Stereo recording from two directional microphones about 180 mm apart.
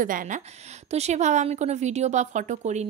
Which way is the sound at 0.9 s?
40° right (ahead or behind).